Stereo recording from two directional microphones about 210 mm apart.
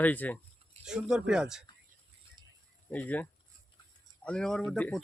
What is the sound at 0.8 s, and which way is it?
Speech, 5° right (ahead or behind).